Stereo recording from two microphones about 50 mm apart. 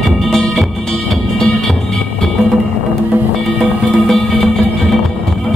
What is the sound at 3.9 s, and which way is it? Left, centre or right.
Music, centre.